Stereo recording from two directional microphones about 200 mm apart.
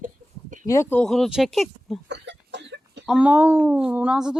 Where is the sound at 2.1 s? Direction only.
60° right (ahead or behind).